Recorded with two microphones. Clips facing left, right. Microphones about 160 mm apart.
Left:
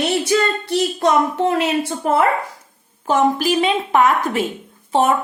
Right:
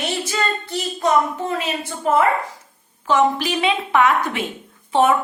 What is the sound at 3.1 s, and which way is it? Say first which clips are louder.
A woman's voice: left 2 dB; 40° left (ahead or behind).